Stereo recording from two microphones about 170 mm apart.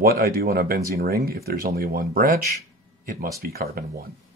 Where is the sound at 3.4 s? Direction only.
65° right (ahead or behind).